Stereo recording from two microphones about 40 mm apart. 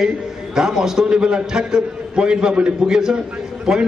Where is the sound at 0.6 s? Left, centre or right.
Centre.